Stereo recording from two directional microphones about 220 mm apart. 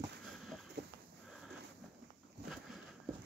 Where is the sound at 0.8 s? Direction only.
50° right (ahead or behind).